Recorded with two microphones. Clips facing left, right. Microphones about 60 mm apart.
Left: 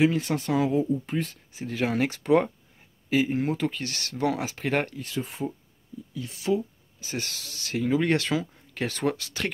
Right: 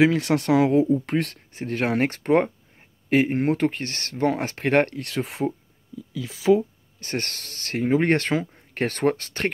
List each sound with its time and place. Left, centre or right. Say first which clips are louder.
0.0 s speech: right 4 dB; right
3.1 s speech: right 4 dB; right
7.0 s speech: right 4 dB; right